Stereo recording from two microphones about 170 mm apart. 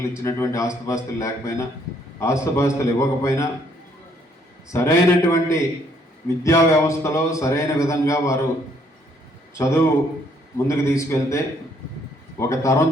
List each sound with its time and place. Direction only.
0.2 s a man's voice: 15° left (ahead or behind)
4.7 s a man's voice: 15° left (ahead or behind)
9.6 s a man's voice: 15° left (ahead or behind)